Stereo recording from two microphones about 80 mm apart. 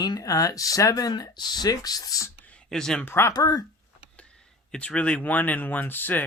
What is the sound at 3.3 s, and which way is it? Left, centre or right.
Speech, left.